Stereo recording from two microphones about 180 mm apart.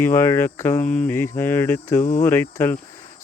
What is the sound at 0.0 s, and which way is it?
Speech, 15° left (ahead or behind).